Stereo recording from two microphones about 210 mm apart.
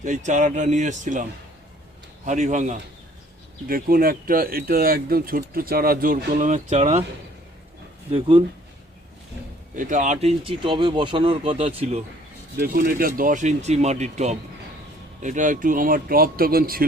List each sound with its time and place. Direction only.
0.0 s speech: 35° right (ahead or behind)
8.1 s speech: 25° right (ahead or behind)
9.7 s speech: 40° right (ahead or behind)
12.5 s speech: 45° right (ahead or behind)